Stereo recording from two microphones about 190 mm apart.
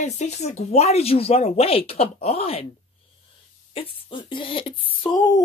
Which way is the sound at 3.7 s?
25° left (ahead or behind).